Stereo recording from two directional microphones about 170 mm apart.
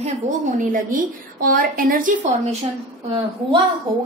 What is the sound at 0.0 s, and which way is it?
A woman's voice, 45° right (ahead or behind).